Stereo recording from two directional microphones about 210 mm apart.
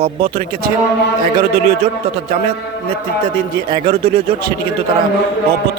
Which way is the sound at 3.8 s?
30° right (ahead or behind).